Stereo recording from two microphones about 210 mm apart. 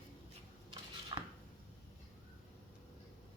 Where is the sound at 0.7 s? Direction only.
20° right (ahead or behind).